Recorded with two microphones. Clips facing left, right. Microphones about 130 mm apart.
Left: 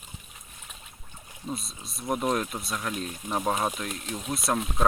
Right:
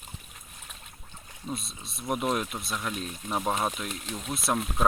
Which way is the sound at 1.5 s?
Centre (ahead or behind).